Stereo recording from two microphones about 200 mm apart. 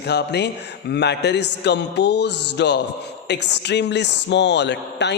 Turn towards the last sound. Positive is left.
turn(degrees=60)  # may be behind; listen again after turning